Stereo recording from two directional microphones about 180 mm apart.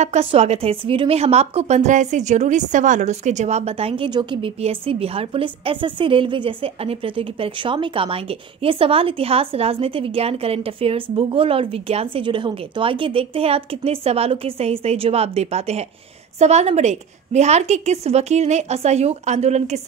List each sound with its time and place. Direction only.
0.0 s a woman's voice: 35° right (ahead or behind)